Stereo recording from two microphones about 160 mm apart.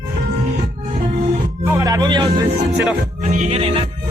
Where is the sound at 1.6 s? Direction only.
20° right (ahead or behind).